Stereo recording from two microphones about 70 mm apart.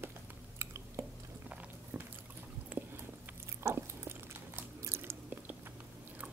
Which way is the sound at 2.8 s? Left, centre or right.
Right.